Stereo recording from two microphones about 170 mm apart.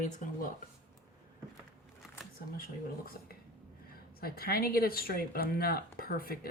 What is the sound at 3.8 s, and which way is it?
Speech, 60° left (ahead or behind).